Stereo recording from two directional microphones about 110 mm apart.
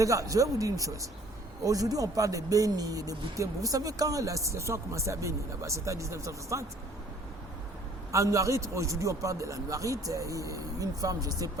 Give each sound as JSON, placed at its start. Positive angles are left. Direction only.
{"t": 0.0, "sound": "speech", "side_deg": -30}
{"t": 8.1, "sound": "a man's voice", "side_deg": -30}